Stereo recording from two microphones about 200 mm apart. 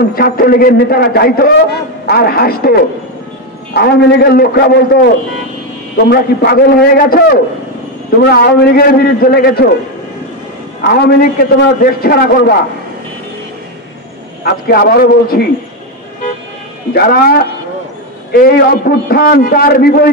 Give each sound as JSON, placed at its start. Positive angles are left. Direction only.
{"t": 0.1, "sound": "a man's voice", "side_deg": 45}
{"t": 10.8, "sound": "a man's voice", "side_deg": 50}
{"t": 14.4, "sound": "a man's voice", "side_deg": 50}
{"t": 16.9, "sound": "a man's voice", "side_deg": 50}